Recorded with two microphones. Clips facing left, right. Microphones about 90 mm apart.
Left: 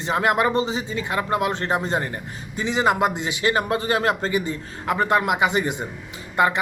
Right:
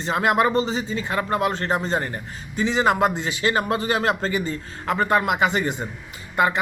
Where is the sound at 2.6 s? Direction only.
45° right (ahead or behind).